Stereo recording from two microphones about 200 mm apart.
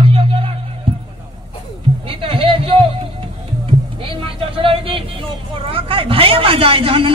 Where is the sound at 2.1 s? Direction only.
25° right (ahead or behind).